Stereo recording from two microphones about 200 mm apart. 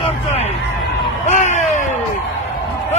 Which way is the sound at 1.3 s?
35° left (ahead or behind).